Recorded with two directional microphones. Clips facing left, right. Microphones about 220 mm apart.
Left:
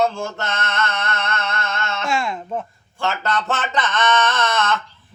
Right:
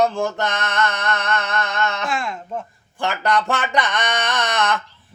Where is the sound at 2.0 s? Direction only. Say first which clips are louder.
Left 2 dB; centre (ahead or behind).